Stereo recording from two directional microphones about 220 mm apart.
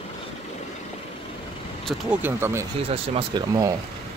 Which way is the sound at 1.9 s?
5° right (ahead or behind).